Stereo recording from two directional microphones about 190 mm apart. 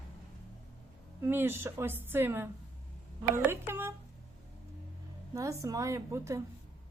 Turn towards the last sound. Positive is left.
turn(degrees=-15)  # may be behind; listen again after turning